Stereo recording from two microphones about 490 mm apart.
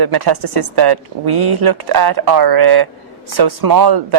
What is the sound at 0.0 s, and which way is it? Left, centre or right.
Speech, right.